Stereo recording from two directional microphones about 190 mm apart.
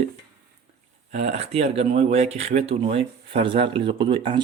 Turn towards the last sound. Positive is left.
turn(degrees=-25)  # may be behind; listen again after turning